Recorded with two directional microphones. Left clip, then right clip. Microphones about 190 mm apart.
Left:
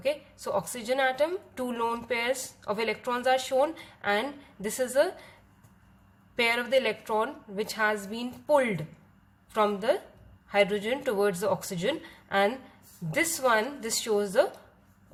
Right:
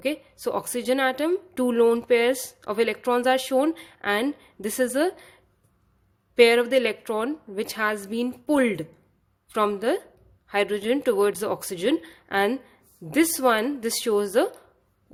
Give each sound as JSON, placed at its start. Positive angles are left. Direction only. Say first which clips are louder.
{"t": 0.0, "sound": "a woman's voice", "louder": "right 3 dB", "side_deg": -50}